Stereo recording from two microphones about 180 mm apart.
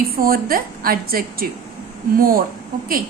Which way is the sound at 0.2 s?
55° right (ahead or behind).